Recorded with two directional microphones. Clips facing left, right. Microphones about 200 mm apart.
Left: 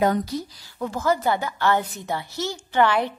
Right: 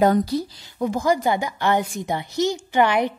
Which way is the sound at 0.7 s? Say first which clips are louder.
Right 3 dB; 15° right (ahead or behind).